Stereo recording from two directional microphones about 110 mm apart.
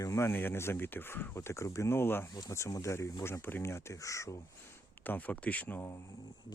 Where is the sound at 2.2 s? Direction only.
35° left (ahead or behind).